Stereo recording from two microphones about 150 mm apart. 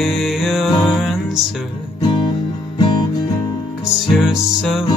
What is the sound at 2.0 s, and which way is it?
Guitar, 30° left (ahead or behind).